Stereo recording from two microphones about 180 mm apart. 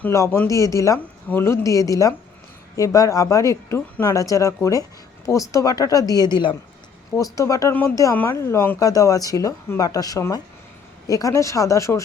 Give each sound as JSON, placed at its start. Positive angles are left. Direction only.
{"t": 0.0, "sound": "speech", "side_deg": 15}